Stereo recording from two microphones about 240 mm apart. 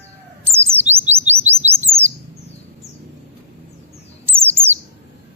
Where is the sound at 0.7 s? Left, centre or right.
Right.